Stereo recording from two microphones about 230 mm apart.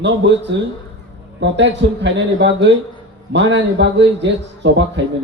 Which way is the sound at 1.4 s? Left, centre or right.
Right.